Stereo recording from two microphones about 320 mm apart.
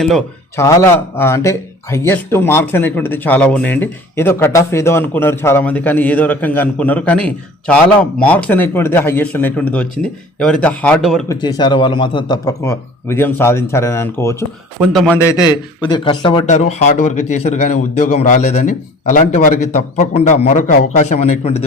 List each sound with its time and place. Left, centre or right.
0.0 s speech: centre
11.3 s a man's voice: centre